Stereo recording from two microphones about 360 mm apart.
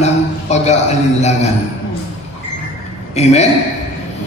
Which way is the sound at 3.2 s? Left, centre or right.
Centre.